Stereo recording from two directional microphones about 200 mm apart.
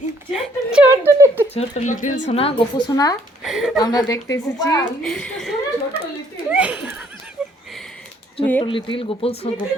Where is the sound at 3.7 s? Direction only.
20° left (ahead or behind).